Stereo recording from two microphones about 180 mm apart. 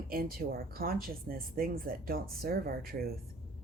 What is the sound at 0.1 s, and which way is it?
A woman's voice, 55° right (ahead or behind).